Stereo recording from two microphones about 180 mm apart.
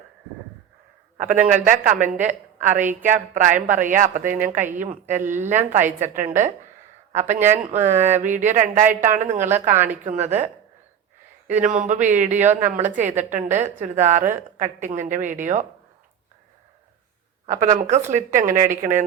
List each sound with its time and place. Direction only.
1.1 s a sound: 45° right (ahead or behind)
1.5 s a woman's voice: 45° right (ahead or behind)
7.4 s speech: 15° right (ahead or behind)
7.9 s a woman's voice: 40° right (ahead or behind)
9.7 s speech: 10° right (ahead or behind)
10.0 s a woman's voice: 40° right (ahead or behind)
17.4 s a woman's voice: 45° right (ahead or behind)